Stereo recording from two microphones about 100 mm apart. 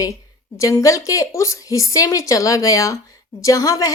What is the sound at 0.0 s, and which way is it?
Speech, 30° left (ahead or behind).